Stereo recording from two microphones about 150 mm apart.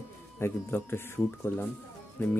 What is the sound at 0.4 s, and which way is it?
Speech, 15° left (ahead or behind).